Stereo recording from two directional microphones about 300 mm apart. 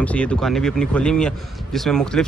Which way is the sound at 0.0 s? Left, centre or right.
Centre.